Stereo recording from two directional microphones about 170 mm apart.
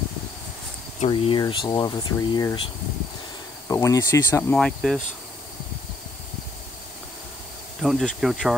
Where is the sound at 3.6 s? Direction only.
15° left (ahead or behind).